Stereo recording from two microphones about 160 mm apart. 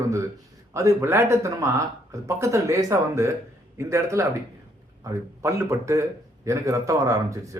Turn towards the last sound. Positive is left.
turn(degrees=-20)  # may be behind; listen again after turning